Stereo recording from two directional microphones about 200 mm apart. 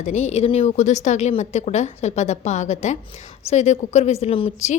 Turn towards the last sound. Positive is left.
turn(degrees=35)  # may be behind; listen again after turning